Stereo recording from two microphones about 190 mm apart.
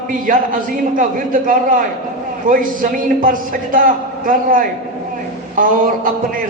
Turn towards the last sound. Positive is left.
turn(degrees=-45)  # may be behind; listen again after turning